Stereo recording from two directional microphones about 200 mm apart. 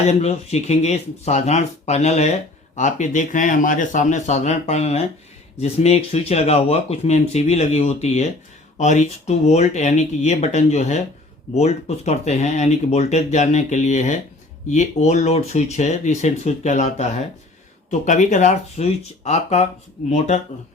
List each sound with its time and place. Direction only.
0.0 s speech: 30° left (ahead or behind)